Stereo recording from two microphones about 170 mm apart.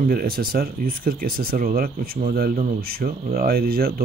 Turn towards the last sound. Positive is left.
turn(degrees=-65)  # may be behind; listen again after turning